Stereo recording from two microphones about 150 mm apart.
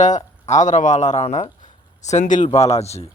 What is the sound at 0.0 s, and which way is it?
Speech, 50° left (ahead or behind).